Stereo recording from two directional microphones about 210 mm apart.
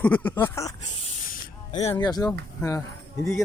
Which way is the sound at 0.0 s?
5° left (ahead or behind).